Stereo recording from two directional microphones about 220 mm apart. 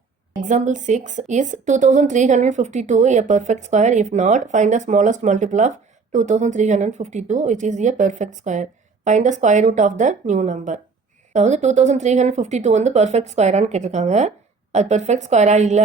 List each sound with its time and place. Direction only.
0.4 s a woman's voice: 35° right (ahead or behind)